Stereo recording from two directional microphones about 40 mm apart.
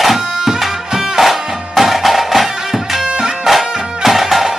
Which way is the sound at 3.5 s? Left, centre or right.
Centre.